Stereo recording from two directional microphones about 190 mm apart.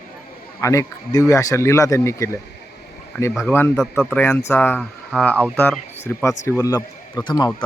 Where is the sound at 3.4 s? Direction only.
10° left (ahead or behind).